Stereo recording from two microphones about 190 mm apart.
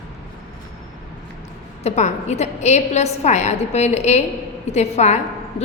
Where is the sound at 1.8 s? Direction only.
35° left (ahead or behind).